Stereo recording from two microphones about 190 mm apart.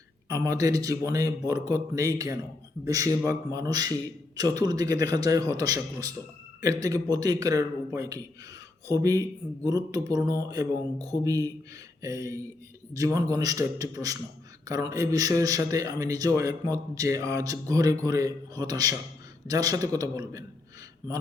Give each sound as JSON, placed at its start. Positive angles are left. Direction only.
{"t": 0.3, "sound": "a man's voice", "side_deg": -15}